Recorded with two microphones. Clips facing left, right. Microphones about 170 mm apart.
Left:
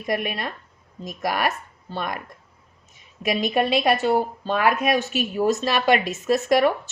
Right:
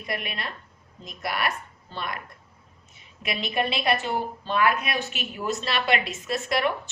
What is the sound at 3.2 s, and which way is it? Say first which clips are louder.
A woman's voice: left 6 dB; 40° left (ahead or behind).